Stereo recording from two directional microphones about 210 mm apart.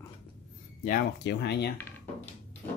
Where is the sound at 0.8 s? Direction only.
50° left (ahead or behind).